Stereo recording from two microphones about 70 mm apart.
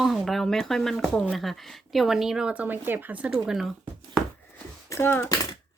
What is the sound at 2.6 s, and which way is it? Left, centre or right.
Speech, right.